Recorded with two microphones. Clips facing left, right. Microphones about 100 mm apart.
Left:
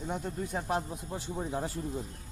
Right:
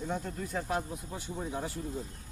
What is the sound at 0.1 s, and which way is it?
Speech, 20° left (ahead or behind).